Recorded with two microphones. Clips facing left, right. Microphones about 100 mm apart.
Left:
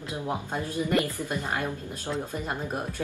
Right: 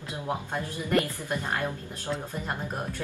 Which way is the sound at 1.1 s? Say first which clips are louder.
Even; 15° left (ahead or behind).